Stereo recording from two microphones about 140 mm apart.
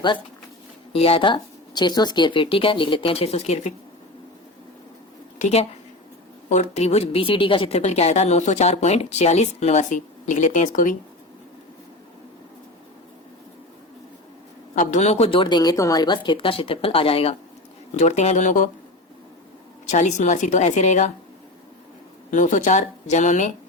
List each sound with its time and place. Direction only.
0.9 s speech: 45° left (ahead or behind)
5.4 s a woman's voice: 50° left (ahead or behind); by 10.9 s 65° left (ahead or behind)
14.8 s speech: 60° left (ahead or behind); by 17.3 s 40° left (ahead or behind)
17.9 s a woman's voice: 55° left (ahead or behind)
19.9 s a woman's voice: 60° left (ahead or behind)
22.3 s a woman's voice: 65° left (ahead or behind)